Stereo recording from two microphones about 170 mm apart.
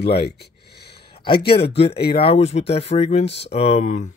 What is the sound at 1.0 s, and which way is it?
Speech, 30° left (ahead or behind).